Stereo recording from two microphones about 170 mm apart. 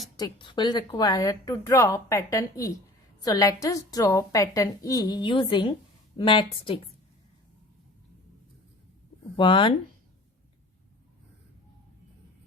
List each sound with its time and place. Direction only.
0.2 s a woman's voice: 25° left (ahead or behind)
9.3 s a woman's voice: 30° left (ahead or behind)